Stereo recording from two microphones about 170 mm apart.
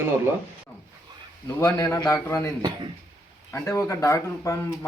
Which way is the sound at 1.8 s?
20° left (ahead or behind).